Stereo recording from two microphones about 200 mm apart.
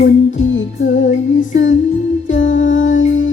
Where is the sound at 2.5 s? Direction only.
40° left (ahead or behind).